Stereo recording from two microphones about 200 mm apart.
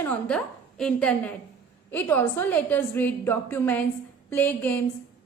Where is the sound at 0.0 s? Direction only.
5° left (ahead or behind).